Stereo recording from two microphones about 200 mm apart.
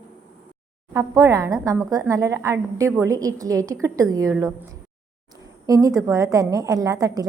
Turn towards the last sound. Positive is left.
turn(degrees=-15)  # may be behind; listen again after turning